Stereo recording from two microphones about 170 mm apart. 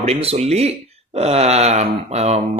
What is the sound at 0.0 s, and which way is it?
Speech, 35° right (ahead or behind).